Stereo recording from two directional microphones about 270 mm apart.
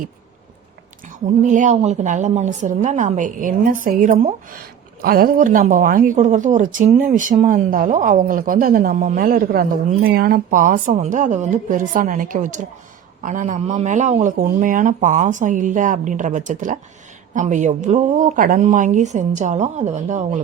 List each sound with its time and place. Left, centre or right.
1.0 s speech: right